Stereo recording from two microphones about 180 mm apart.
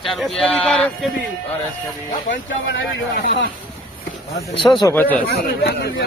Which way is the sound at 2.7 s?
75° left (ahead or behind).